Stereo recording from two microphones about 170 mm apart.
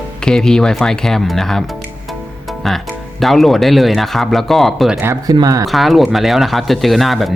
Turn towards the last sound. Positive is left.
turn(degrees=0)  # may be behind; listen again after turning